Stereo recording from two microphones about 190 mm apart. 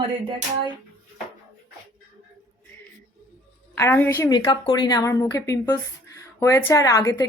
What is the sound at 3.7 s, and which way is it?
Speech, 10° left (ahead or behind).